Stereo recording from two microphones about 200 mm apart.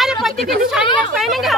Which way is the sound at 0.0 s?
Centre (ahead or behind).